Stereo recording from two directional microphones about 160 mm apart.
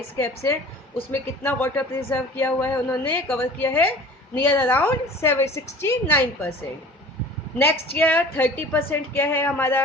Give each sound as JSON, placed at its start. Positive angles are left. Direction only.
{"t": 0.2, "sound": "speech", "side_deg": 15}
{"t": 7.9, "sound": "speech", "side_deg": 10}